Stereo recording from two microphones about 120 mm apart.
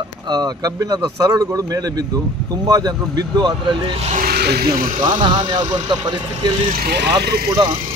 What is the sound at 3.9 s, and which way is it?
Speech, 65° right (ahead or behind).